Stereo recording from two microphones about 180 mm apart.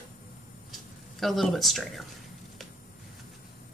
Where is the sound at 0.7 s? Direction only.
Centre (ahead or behind).